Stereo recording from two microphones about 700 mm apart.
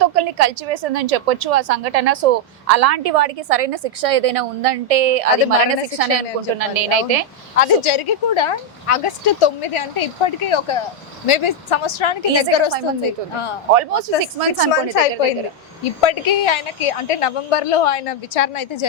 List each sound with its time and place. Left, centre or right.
0.0 s a woman's voice: right
7.5 s a woman's voice: left
14.3 s a woman's voice: right
15.8 s a woman's voice: left